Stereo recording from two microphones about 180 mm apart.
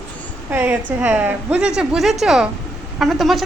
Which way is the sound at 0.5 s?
10° right (ahead or behind).